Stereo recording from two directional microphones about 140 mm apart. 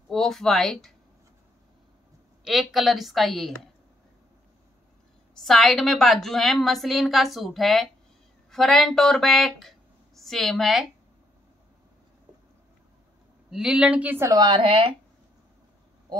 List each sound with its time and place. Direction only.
0.1 s a woman's voice: 5° left (ahead or behind)
2.4 s a woman's voice: centre (ahead or behind)
5.4 s a woman's voice: centre (ahead or behind)
13.5 s speech: 5° right (ahead or behind)
14.3 s speech: 30° right (ahead or behind)